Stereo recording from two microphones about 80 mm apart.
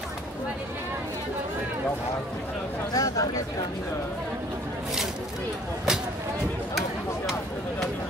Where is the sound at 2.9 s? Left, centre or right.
Left.